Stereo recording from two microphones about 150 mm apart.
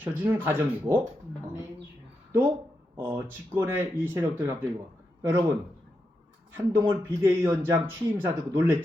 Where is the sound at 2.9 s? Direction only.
15° right (ahead or behind).